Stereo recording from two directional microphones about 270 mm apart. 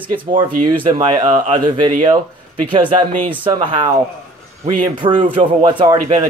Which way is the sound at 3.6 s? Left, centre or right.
Right.